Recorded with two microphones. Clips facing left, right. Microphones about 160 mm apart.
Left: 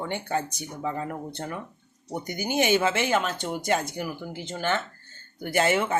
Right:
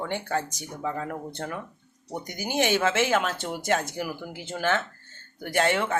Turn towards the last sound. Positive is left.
turn(degrees=5)  # may be behind; listen again after turning